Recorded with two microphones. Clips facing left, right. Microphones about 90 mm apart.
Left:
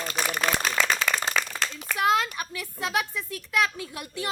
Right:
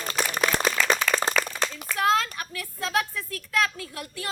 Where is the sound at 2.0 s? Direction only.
15° left (ahead or behind).